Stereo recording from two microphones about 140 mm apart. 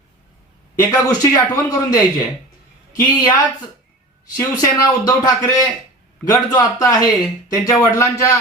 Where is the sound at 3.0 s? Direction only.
30° left (ahead or behind).